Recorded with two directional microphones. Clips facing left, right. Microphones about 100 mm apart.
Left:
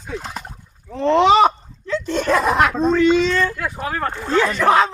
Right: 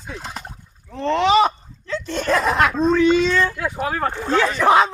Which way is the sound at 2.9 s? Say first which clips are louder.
Even; 10° right (ahead or behind).